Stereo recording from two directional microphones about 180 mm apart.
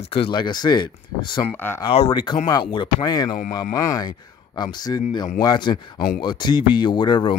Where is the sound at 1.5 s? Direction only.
10° left (ahead or behind).